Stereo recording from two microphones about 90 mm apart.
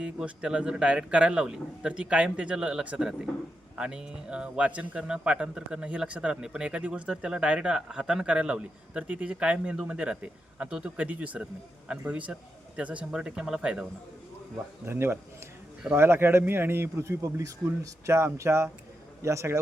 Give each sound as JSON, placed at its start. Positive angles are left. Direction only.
{"t": 0.0, "sound": "speech", "side_deg": -10}
{"t": 14.8, "sound": "speech", "side_deg": -25}